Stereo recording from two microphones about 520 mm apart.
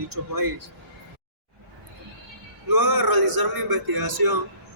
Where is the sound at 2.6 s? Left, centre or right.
Right.